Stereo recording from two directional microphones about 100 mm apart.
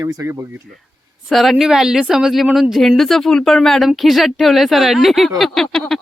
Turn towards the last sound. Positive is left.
turn(degrees=5)  # may be behind; listen again after turning